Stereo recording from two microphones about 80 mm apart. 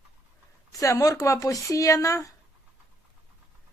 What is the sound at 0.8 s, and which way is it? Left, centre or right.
A man's voice, left.